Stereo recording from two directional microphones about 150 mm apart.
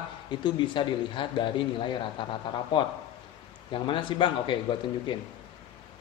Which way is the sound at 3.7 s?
35° left (ahead or behind).